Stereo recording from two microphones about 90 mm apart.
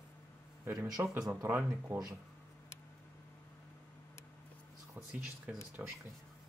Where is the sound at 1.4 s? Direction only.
25° right (ahead or behind).